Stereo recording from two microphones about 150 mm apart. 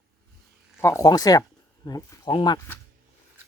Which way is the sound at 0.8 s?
20° left (ahead or behind).